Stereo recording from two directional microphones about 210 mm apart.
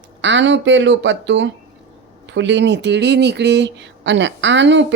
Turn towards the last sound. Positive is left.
turn(degrees=-60)  # may be behind; listen again after turning